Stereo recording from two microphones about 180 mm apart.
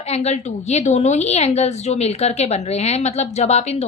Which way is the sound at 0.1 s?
35° left (ahead or behind).